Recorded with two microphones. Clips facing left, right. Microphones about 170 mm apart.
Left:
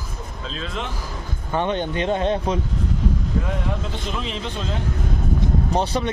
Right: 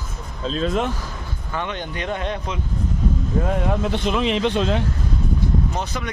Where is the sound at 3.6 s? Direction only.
65° right (ahead or behind).